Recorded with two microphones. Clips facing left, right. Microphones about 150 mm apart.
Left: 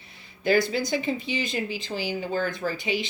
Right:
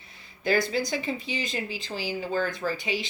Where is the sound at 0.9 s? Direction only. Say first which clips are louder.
Left 3 dB; 35° right (ahead or behind).